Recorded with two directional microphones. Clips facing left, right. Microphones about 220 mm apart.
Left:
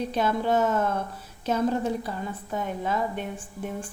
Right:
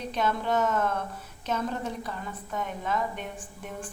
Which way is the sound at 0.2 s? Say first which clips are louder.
Left 3 dB; 30° left (ahead or behind).